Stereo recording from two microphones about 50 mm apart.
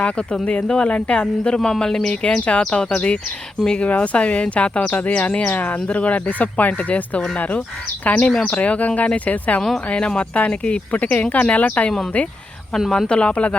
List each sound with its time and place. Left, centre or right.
0.0 s speech: left
11.9 s speech: centre
13.1 s speech: centre